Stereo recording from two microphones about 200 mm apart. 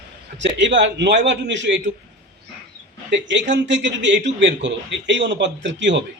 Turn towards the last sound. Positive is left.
turn(degrees=-65)  # may be behind; listen again after turning